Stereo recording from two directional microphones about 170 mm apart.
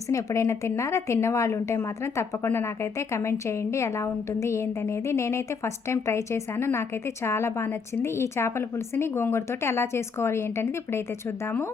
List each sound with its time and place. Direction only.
0.1 s a woman's voice: 20° left (ahead or behind)